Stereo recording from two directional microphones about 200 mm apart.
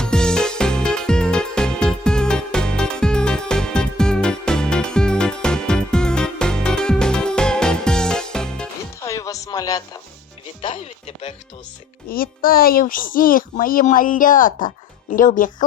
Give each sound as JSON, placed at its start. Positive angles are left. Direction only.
{"t": 0.0, "sound": "music", "side_deg": 5}
{"t": 9.0, "sound": "music", "side_deg": 15}
{"t": 12.0, "sound": "a child's voice", "side_deg": 45}